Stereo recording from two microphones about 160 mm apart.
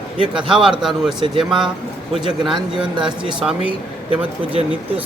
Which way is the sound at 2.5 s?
30° right (ahead or behind).